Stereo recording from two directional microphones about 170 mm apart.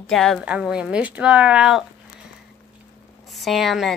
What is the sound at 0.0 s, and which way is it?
Speech, 5° left (ahead or behind).